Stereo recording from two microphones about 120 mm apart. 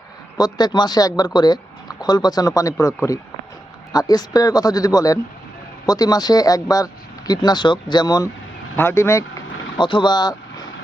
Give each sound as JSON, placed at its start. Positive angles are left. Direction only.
{"t": 0.3, "sound": "speech", "side_deg": 35}
{"t": 8.7, "sound": "speech", "side_deg": 20}
{"t": 9.7, "sound": "speech", "side_deg": 40}